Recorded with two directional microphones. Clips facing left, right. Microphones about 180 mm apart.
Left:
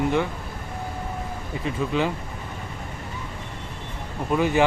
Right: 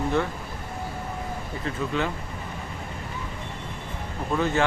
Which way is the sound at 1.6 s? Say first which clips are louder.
Left 3 dB; 15° left (ahead or behind).